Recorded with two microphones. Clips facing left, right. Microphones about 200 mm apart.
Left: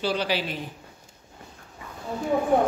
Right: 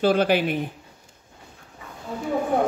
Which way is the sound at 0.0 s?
50° right (ahead or behind).